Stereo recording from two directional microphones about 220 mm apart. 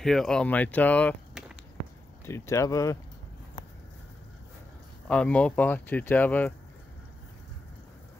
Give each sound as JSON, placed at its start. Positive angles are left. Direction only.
{"t": 0.0, "sound": "speech", "side_deg": 0}
{"t": 5.0, "sound": "speech", "side_deg": 5}